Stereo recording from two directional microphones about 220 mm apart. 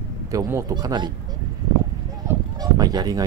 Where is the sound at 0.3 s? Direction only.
15° right (ahead or behind).